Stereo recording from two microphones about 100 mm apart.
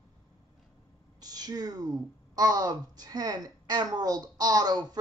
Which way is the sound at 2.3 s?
40° right (ahead or behind).